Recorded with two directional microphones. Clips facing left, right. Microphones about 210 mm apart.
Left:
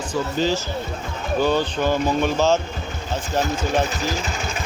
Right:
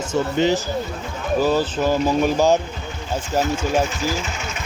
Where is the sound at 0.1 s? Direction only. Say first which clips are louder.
Right 3 dB; 20° right (ahead or behind).